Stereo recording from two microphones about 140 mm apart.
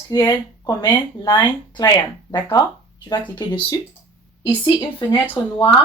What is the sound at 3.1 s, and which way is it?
Speech, 30° left (ahead or behind).